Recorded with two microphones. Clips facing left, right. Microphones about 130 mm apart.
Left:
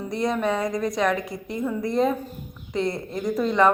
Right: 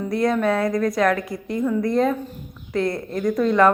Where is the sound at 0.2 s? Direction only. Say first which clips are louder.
Right 3 dB; centre (ahead or behind).